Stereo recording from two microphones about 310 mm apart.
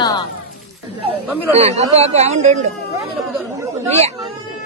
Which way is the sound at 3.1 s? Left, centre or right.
Centre.